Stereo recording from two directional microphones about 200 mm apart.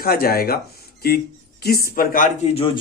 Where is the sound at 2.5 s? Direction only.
30° left (ahead or behind).